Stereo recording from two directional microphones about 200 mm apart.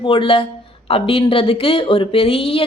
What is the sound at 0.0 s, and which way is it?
Speech, 25° left (ahead or behind).